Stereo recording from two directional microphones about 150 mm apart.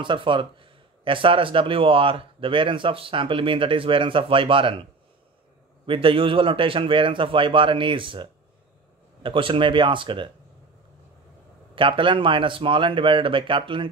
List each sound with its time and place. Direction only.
0.0 s speech: 35° right (ahead or behind)
5.9 s speech: 35° right (ahead or behind)
11.7 s speech: 35° right (ahead or behind)